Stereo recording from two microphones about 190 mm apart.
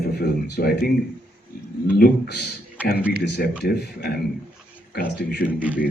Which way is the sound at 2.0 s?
55° left (ahead or behind).